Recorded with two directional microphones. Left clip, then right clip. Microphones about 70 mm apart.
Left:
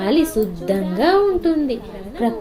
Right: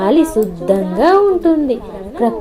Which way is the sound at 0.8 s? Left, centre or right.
Right.